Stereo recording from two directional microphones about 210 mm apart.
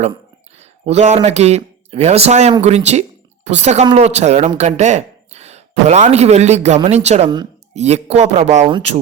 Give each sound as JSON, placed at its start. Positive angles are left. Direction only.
{"t": 0.0, "sound": "a woman's voice", "side_deg": -30}